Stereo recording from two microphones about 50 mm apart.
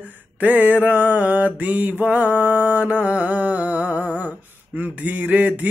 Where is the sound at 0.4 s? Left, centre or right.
Right.